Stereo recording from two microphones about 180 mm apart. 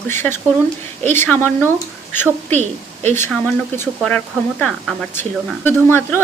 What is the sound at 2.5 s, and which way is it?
Speech, 40° right (ahead or behind).